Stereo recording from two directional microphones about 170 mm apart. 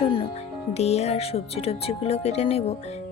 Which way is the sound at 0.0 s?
35° left (ahead or behind).